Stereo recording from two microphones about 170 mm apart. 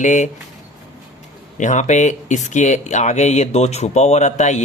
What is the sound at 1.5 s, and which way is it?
Speech, 45° left (ahead or behind).